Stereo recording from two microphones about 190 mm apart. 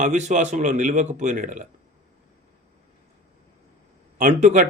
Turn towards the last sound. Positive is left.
turn(degrees=-40)  # may be behind; listen again after turning